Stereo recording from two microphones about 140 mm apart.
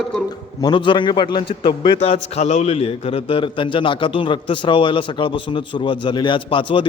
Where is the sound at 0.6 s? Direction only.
35° left (ahead or behind).